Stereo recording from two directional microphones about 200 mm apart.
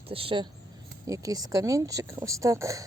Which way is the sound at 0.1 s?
25° right (ahead or behind).